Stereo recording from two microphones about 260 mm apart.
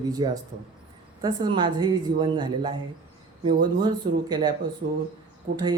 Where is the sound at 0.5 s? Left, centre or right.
Right.